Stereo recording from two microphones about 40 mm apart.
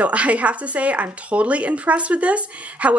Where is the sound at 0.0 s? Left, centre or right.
Right.